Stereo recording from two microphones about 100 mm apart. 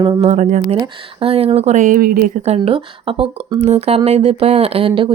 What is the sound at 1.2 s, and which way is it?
Speech, 75° right (ahead or behind).